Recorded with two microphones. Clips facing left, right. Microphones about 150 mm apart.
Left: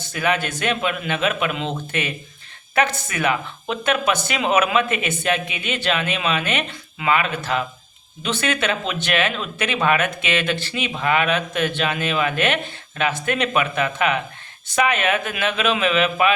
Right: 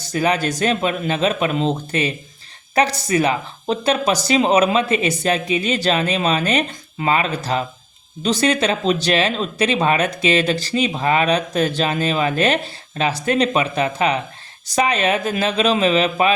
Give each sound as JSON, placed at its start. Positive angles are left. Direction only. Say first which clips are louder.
{"t": 0.1, "sound": "speech", "louder": "right 4 dB", "side_deg": -35}